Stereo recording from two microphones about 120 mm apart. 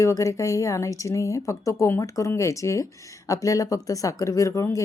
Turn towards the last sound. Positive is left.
turn(degrees=25)  # may be behind; listen again after turning